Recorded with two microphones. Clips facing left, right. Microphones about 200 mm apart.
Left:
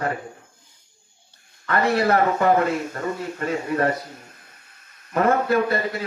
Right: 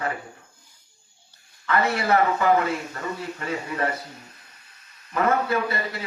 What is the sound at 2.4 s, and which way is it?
Speech, 45° left (ahead or behind).